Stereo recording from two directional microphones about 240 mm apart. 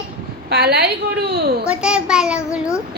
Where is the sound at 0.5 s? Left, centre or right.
Right.